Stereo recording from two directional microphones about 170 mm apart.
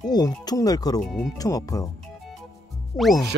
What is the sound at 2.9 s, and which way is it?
Speech, centre (ahead or behind).